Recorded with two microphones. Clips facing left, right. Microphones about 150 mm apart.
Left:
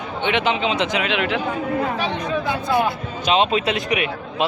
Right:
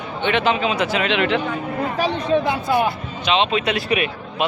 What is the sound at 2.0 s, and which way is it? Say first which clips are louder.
Speech: right 4 dB; 35° right (ahead or behind).